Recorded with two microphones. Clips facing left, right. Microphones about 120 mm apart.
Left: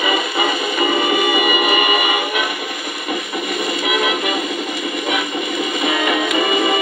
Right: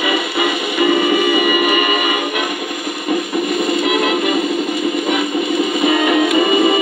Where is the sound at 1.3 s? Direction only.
20° left (ahead or behind).